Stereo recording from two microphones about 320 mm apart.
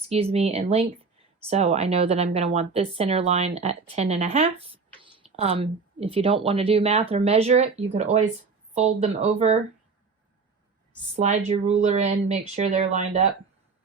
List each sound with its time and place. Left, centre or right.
0.1 s a woman's voice: centre
11.1 s a woman's voice: right